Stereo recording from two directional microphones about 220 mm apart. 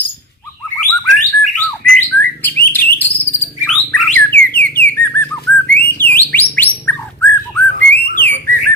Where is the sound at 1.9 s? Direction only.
10° left (ahead or behind).